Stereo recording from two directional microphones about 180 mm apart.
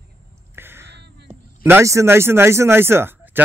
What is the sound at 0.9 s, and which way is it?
Crow, 70° right (ahead or behind).